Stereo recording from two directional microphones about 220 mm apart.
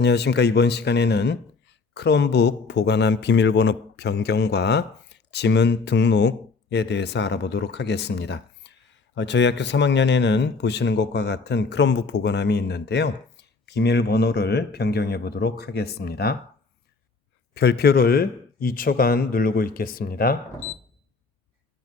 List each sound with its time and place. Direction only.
0.0 s speech: 50° left (ahead or behind)
17.5 s speech: 50° left (ahead or behind)